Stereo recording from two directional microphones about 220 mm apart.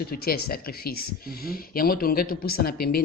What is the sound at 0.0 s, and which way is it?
A man's voice, 45° left (ahead or behind).